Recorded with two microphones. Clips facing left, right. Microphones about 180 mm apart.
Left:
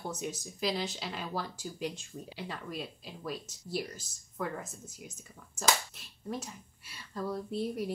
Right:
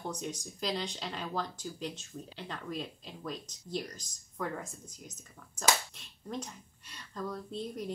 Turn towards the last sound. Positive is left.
turn(degrees=10)  # may be behind; listen again after turning